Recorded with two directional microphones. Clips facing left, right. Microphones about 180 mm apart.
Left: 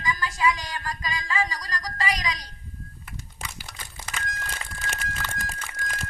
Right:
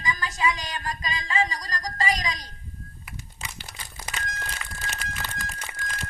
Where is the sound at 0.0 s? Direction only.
20° right (ahead or behind).